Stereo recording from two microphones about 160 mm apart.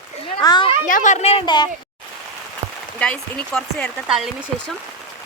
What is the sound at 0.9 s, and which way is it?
Speech, 55° left (ahead or behind).